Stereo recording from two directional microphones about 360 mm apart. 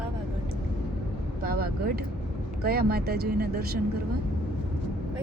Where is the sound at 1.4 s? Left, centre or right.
Right.